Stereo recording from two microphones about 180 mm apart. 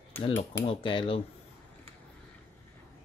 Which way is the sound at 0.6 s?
30° left (ahead or behind).